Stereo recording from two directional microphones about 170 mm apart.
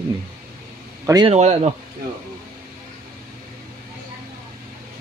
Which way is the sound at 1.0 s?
25° right (ahead or behind).